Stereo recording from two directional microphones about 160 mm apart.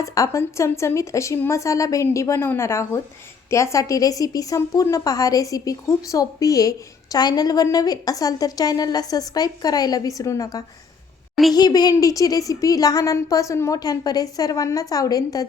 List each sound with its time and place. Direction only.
0.0 s a woman's voice: 20° left (ahead or behind)